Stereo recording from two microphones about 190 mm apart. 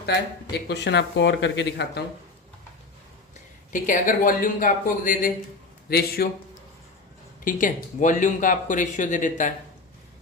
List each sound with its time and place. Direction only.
0.5 s speech: 65° left (ahead or behind)
3.7 s a man's voice: 45° left (ahead or behind)
7.4 s speech: 45° left (ahead or behind)